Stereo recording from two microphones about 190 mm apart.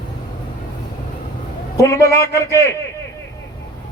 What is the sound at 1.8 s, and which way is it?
Speech, 15° left (ahead or behind).